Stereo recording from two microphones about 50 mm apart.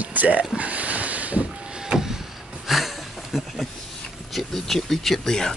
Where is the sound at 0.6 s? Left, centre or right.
Right.